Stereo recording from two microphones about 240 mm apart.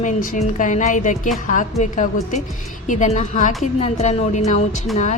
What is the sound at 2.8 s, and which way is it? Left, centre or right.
A woman's voice, left.